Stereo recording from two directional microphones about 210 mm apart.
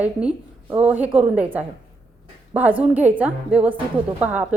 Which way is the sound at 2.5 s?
10° right (ahead or behind).